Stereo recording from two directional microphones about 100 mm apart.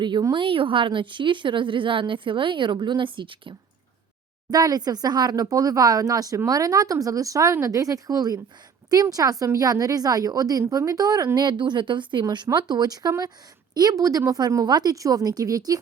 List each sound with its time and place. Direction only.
0.0 s speech: 45° right (ahead or behind)
0.3 s speech: 60° right (ahead or behind)
4.5 s speech: 40° right (ahead or behind)
11.3 s speech: 50° right (ahead or behind)